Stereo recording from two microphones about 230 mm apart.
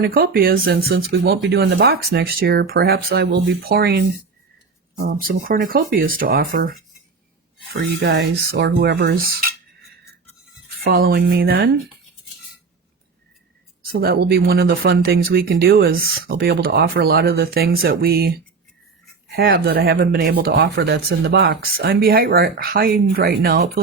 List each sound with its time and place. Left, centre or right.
0.0 s speech: right
5.0 s speech: right
10.8 s speech: right
13.9 s speech: right
19.4 s speech: right